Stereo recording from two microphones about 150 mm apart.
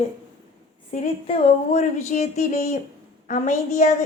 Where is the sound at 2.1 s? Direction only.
50° left (ahead or behind).